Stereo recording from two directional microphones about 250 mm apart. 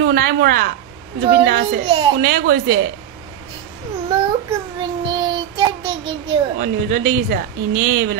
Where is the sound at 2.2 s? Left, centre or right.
Right.